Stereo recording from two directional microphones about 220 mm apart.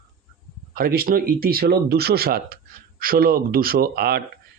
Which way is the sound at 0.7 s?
40° right (ahead or behind).